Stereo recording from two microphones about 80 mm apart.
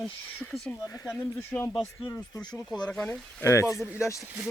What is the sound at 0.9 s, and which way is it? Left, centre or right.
Speech, left.